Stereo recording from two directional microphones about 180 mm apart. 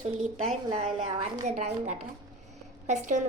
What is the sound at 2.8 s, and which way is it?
Speech, 40° right (ahead or behind).